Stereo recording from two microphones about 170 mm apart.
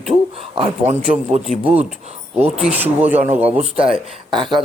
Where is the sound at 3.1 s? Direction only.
45° right (ahead or behind).